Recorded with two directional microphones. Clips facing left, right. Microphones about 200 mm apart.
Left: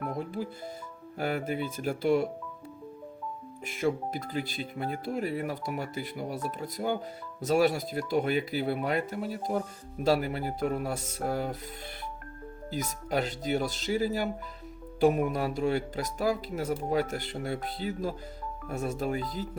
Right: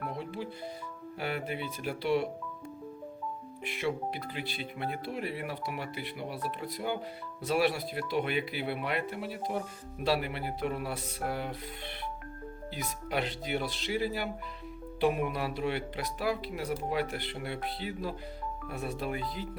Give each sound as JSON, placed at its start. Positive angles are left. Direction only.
{"t": 0.1, "sound": "music", "side_deg": 45}
{"t": 1.2, "sound": "speech", "side_deg": 45}
{"t": 3.6, "sound": "speech", "side_deg": 45}
{"t": 11.3, "sound": "music", "side_deg": 40}
{"t": 13.1, "sound": "speech", "side_deg": 45}